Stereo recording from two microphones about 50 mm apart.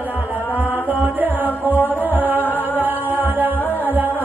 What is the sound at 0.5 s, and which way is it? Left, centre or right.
Music, left.